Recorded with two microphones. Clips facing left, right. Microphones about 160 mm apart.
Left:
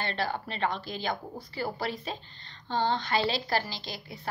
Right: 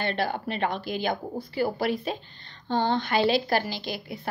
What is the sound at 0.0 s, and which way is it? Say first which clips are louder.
A woman's voice: right 4 dB; 55° right (ahead or behind).